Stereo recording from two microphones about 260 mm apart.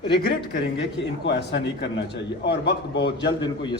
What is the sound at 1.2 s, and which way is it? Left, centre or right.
A man's voice, left.